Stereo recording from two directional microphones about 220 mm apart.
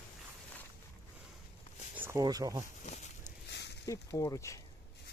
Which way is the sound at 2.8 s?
30° left (ahead or behind).